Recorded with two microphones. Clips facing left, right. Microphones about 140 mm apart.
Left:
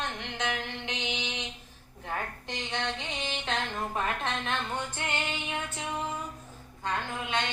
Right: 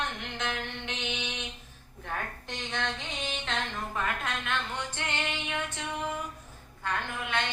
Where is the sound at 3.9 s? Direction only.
25° left (ahead or behind).